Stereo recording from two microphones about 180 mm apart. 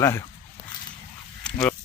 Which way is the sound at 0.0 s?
15° left (ahead or behind).